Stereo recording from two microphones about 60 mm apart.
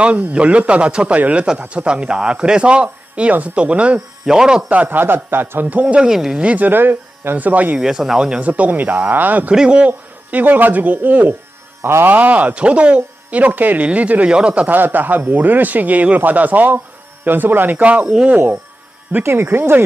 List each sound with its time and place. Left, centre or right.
0.0 s speech: right
4.3 s speech: centre
4.6 s speech: right; by 6.4 s centre
6.4 s speech: right
7.8 s speech: centre
8.4 s speech: right
9.5 s speech: centre
11.8 s speech: right
12.1 s speech: right
14.7 s speech: right